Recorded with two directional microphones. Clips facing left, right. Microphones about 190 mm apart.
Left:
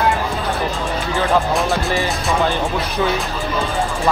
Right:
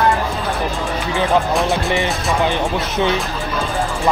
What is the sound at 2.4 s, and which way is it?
Speech, 20° right (ahead or behind).